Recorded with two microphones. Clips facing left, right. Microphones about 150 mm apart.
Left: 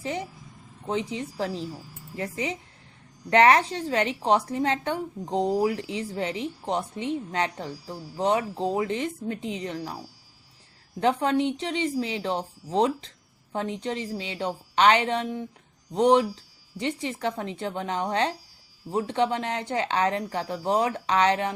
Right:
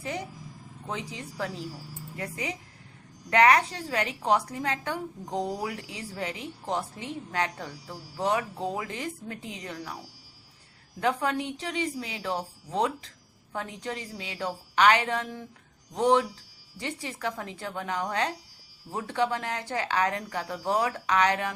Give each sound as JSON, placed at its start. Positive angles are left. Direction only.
{"t": 0.0, "sound": "a woman's voice", "side_deg": 20}
{"t": 11.0, "sound": "a woman's voice", "side_deg": 25}